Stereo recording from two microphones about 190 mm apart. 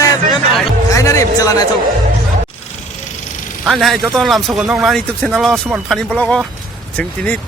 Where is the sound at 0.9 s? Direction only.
15° left (ahead or behind).